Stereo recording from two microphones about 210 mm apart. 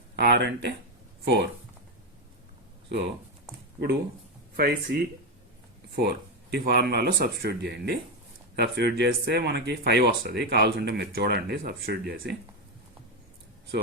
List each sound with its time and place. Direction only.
0.2 s speech: 55° right (ahead or behind)
4.5 s speech: 45° right (ahead or behind)